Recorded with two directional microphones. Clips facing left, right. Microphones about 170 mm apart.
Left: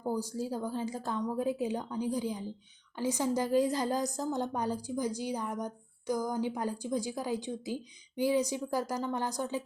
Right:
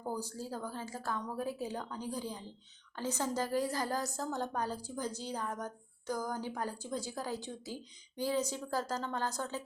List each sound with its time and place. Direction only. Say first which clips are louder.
0.0 s a woman's voice: left 6 dB; 10° left (ahead or behind)